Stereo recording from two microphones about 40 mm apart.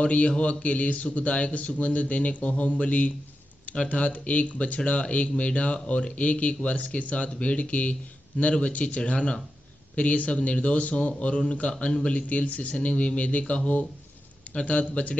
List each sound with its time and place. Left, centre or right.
0.0 s a man's voice: left
12.1 s speech: left